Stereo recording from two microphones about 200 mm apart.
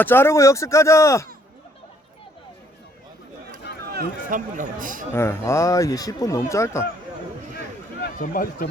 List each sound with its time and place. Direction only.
0.0 s speech: 10° left (ahead or behind)
3.9 s speech: 40° right (ahead or behind)
5.1 s speech: 15° left (ahead or behind)
8.2 s speech: 45° left (ahead or behind)